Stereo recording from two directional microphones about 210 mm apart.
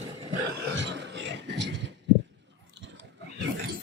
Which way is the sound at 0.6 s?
60° right (ahead or behind).